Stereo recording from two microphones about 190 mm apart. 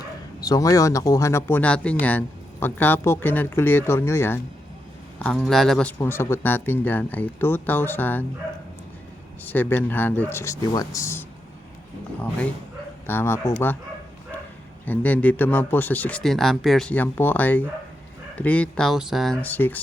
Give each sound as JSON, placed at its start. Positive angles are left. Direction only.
{"t": 0.4, "sound": "speech", "side_deg": 20}
{"t": 5.2, "sound": "speech", "side_deg": 0}
{"t": 6.0, "sound": "speech", "side_deg": 15}
{"t": 9.4, "sound": "speech", "side_deg": 10}
{"t": 13.1, "sound": "speech", "side_deg": 10}
{"t": 14.8, "sound": "speech", "side_deg": 10}